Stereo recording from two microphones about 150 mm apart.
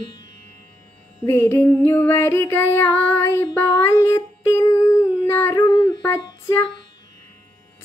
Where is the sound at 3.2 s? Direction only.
15° left (ahead or behind).